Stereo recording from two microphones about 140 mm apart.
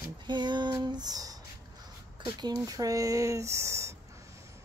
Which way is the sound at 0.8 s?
30° right (ahead or behind).